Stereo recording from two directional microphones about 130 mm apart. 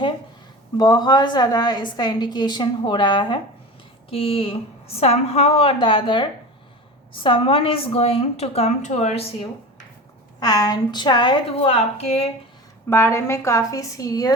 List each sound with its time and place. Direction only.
0.8 s a woman's voice: 30° left (ahead or behind); by 9.2 s 60° left (ahead or behind)
10.4 s a woman's voice: 30° left (ahead or behind)
11.5 s a woman's voice: 50° left (ahead or behind)
12.9 s a woman's voice: 20° left (ahead or behind)